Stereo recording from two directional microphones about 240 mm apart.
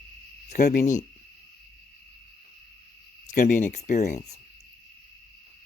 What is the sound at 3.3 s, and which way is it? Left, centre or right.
Speech, left.